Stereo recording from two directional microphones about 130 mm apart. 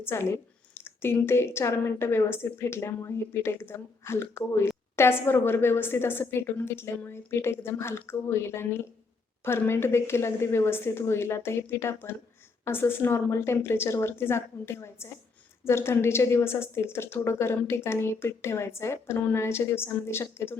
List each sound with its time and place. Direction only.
0.0 s a woman's voice: 20° left (ahead or behind)